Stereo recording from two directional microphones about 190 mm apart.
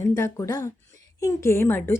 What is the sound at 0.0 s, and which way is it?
Speech, 15° left (ahead or behind).